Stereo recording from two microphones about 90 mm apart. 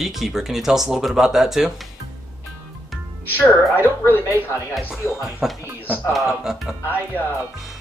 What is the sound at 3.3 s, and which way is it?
A woman's voice, 25° left (ahead or behind).